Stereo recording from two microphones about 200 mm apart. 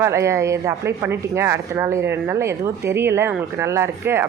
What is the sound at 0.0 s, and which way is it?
A woman's voice, 15° right (ahead or behind).